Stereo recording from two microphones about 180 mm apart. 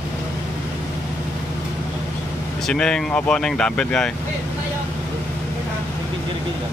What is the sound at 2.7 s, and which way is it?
Speech, 5° left (ahead or behind).